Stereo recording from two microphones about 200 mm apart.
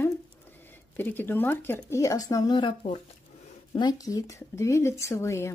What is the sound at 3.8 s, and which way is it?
Speech, 20° left (ahead or behind).